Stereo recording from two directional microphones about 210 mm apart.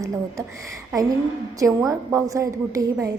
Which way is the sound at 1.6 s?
15° right (ahead or behind).